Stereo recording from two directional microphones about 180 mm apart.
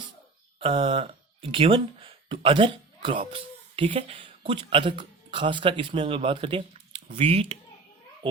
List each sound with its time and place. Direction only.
0.6 s speech: 30° right (ahead or behind)